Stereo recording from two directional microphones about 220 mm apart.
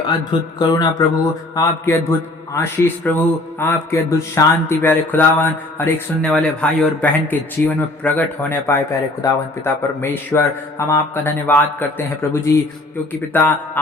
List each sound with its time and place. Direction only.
0.1 s speech: 20° left (ahead or behind)